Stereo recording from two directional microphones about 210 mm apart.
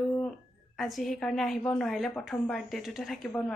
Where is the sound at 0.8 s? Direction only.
Centre (ahead or behind).